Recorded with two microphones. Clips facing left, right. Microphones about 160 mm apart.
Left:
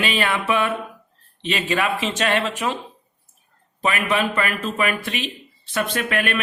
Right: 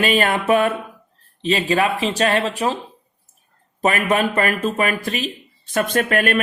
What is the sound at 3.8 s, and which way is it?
A man's voice, 45° right (ahead or behind).